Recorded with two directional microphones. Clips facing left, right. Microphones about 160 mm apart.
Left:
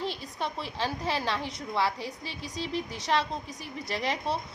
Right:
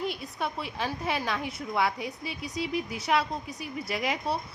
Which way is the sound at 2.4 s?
35° left (ahead or behind).